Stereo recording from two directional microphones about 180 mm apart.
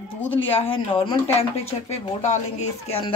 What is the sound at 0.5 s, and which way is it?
Speech, 30° left (ahead or behind).